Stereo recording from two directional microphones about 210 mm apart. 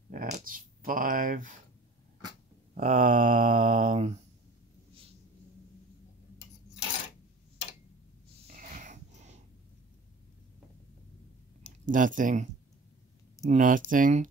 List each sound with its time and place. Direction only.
0.1 s speech: 40° right (ahead or behind)
2.7 s mantra: 40° right (ahead or behind)
8.5 s dog: 40° right (ahead or behind)
11.8 s mantra: 40° right (ahead or behind)
13.5 s mantra: 40° right (ahead or behind)